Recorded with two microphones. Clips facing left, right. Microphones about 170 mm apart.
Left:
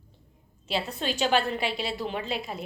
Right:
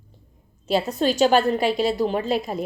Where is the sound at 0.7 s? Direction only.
45° right (ahead or behind).